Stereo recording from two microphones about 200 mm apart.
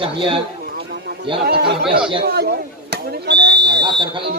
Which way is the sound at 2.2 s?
55° right (ahead or behind).